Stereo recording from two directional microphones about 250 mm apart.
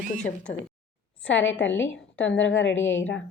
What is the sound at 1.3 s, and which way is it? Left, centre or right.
A woman's voice, left.